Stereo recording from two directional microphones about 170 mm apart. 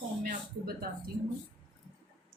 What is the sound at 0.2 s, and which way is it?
Speech, 60° right (ahead or behind).